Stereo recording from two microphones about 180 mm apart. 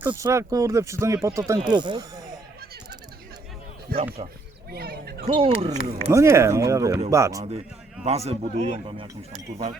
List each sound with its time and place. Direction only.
0.1 s speech: 15° right (ahead or behind)
3.9 s a man's voice: 55° right (ahead or behind)
5.2 s speech: 30° right (ahead or behind)
6.1 s speech: 15° right (ahead or behind)
8.0 s speech: 35° right (ahead or behind)